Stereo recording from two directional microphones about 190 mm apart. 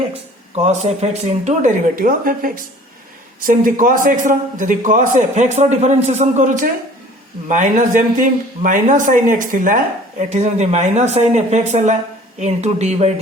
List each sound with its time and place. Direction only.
0.5 s a man's voice: 35° right (ahead or behind)